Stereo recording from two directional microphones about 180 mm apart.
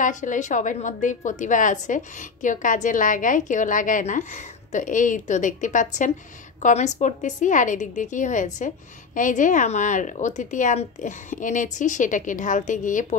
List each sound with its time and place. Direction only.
0.0 s a woman's voice: 45° left (ahead or behind)